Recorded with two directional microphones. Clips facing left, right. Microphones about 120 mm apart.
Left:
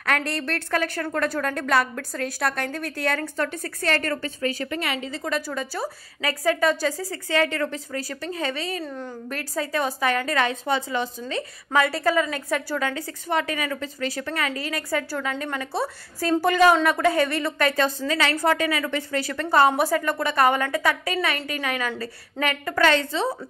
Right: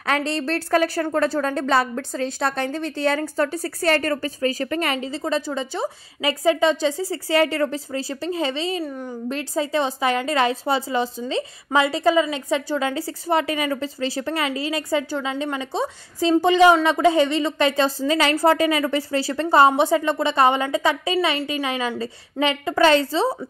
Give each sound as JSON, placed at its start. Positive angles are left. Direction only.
{"t": 0.0, "sound": "a woman's voice", "side_deg": -30}
{"t": 5.1, "sound": "a woman's voice", "side_deg": -30}